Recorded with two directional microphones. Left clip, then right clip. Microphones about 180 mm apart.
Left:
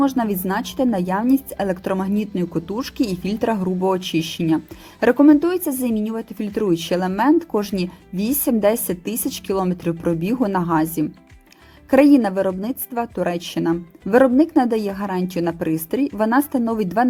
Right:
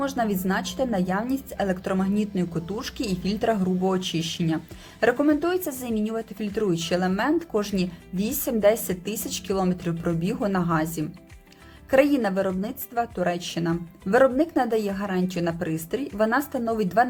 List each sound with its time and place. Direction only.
0.0 s a woman's voice: 40° left (ahead or behind)